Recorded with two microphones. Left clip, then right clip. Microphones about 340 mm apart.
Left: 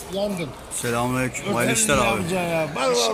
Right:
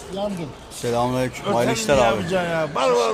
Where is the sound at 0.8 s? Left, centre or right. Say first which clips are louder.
Right 2 dB; right.